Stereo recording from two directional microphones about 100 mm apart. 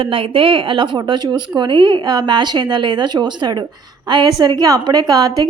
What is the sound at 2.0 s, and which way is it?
A woman's voice, 40° right (ahead or behind).